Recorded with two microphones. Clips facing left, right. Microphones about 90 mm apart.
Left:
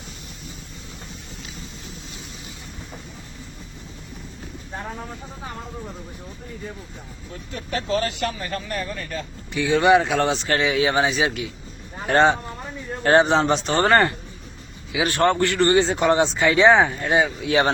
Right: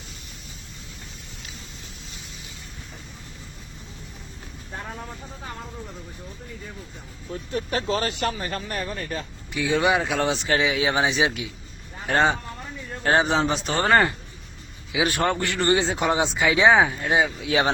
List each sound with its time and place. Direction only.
7.5 s speech: 30° right (ahead or behind)
9.5 s speech: 5° right (ahead or behind)
12.0 s speech: centre (ahead or behind)
14.9 s speech: 10° right (ahead or behind)